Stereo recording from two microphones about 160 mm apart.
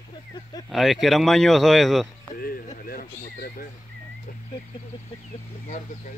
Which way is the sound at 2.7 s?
60° left (ahead or behind).